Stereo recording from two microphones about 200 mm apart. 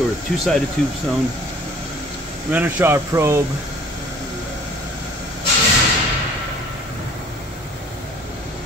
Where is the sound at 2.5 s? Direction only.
10° right (ahead or behind).